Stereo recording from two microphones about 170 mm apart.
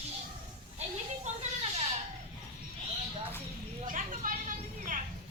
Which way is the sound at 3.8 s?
50° right (ahead or behind).